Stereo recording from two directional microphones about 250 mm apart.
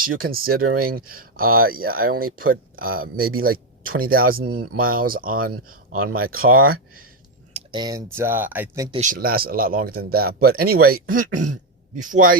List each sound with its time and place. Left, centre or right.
0.0 s speech: right
7.5 s speech: centre
9.0 s speech: right